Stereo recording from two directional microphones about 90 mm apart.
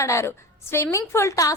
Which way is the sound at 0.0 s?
30° left (ahead or behind).